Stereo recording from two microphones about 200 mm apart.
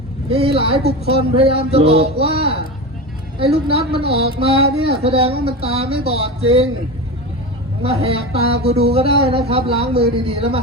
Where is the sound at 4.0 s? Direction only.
55° right (ahead or behind).